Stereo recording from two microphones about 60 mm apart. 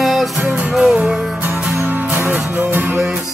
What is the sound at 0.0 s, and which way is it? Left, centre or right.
Music, centre.